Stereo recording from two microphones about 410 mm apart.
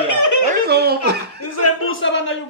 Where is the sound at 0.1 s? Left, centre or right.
Left.